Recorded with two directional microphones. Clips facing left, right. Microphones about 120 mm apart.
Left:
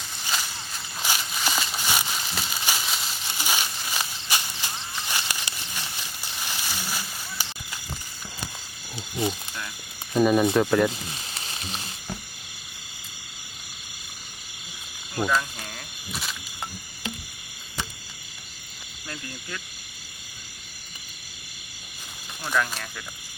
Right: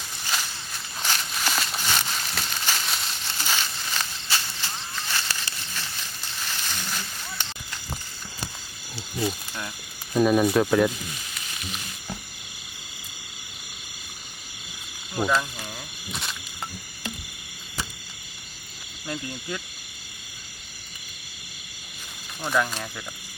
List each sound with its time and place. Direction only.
0.3 s a sound: 5° left (ahead or behind)
9.0 s cricket: 20° left (ahead or behind)
10.2 s speech: centre (ahead or behind)
11.1 s frying: 30° left (ahead or behind)
15.3 s speech: 15° right (ahead or behind)
19.0 s speech: 20° right (ahead or behind)
22.5 s speech: 15° right (ahead or behind)